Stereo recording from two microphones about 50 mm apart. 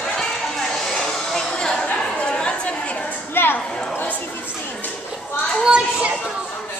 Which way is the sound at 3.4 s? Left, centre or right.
Left.